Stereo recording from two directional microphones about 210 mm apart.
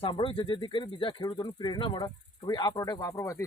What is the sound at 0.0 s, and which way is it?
Speech, 25° left (ahead or behind).